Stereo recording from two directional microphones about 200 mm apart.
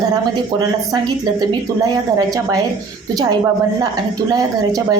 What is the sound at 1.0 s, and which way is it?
A woman's voice, 20° right (ahead or behind).